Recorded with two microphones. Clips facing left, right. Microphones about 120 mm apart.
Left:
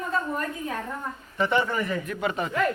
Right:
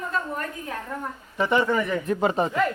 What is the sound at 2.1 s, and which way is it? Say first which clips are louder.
Speech: right 6 dB; 30° right (ahead or behind).